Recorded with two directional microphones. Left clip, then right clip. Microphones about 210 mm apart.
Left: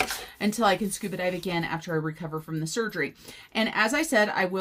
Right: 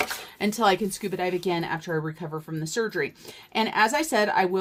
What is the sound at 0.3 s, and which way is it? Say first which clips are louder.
Speech: right 2 dB; 45° right (ahead or behind).